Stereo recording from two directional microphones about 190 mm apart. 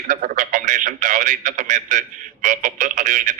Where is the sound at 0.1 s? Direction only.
40° right (ahead or behind).